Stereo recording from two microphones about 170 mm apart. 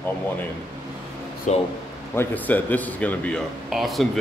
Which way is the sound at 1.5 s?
45° left (ahead or behind).